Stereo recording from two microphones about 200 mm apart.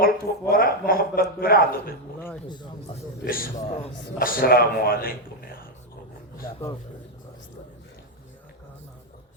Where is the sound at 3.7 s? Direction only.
30° left (ahead or behind).